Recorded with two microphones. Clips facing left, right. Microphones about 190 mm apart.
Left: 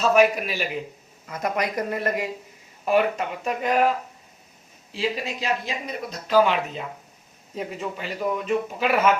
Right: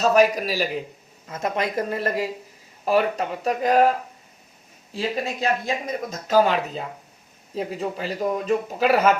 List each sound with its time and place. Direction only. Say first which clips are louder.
0.0 s speech: right 1 dB; 40° right (ahead or behind)
1.3 s speech: right 1 dB; 25° right (ahead or behind)
4.9 s speech: right 1 dB; 50° right (ahead or behind)